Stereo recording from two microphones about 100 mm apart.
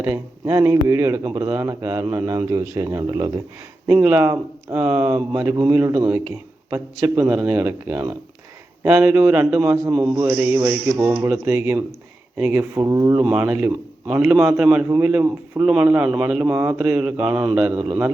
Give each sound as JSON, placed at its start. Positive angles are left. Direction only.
{"t": 0.0, "sound": "a man's voice", "side_deg": -25}
{"t": 3.9, "sound": "a man's voice", "side_deg": -15}
{"t": 13.2, "sound": "a man's voice", "side_deg": -20}
{"t": 14.4, "sound": "speech", "side_deg": -5}
{"t": 14.8, "sound": "a man's voice", "side_deg": -20}
{"t": 15.5, "sound": "speech", "side_deg": -10}